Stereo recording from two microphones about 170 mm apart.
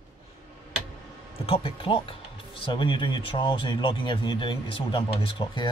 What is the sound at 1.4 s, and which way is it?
Speech, 35° left (ahead or behind).